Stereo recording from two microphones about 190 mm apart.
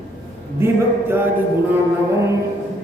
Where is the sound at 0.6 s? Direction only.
10° right (ahead or behind).